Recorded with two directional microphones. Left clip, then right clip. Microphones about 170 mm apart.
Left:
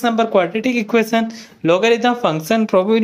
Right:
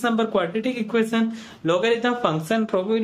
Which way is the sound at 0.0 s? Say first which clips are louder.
Left 7 dB; 20° left (ahead or behind).